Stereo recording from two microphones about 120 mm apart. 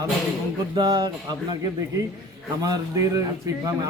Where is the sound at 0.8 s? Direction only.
35° right (ahead or behind).